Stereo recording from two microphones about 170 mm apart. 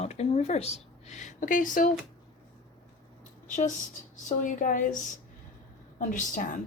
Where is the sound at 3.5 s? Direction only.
50° left (ahead or behind).